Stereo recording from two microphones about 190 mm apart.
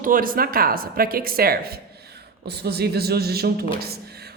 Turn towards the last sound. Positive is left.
turn(degrees=-55)  # may be behind; listen again after turning